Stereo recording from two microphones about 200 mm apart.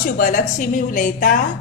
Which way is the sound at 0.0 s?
40° left (ahead or behind).